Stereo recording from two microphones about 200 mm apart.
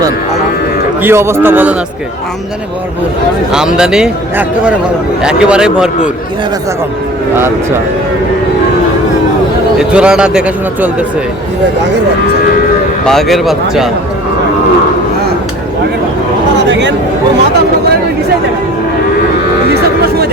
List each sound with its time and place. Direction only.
1.0 s a man's voice: 15° right (ahead or behind)
3.8 s a man's voice: 5° right (ahead or behind)
9.7 s a man's voice: 5° right (ahead or behind)
13.1 s a man's voice: centre (ahead or behind)
16.6 s a sound: 60° right (ahead or behind)